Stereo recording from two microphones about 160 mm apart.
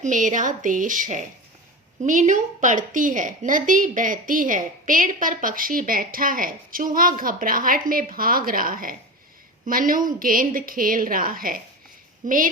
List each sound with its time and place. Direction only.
0.0 s a woman's voice: 50° right (ahead or behind)